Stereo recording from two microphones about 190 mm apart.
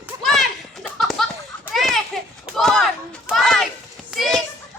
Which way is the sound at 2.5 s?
Centre (ahead or behind).